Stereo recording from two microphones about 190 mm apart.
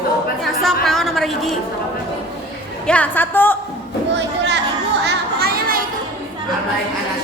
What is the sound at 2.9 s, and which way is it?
Speech, 10° left (ahead or behind).